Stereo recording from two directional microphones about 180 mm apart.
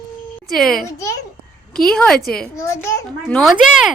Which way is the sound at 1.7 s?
5° left (ahead or behind).